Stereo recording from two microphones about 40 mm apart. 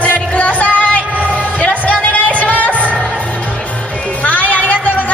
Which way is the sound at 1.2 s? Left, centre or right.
Left.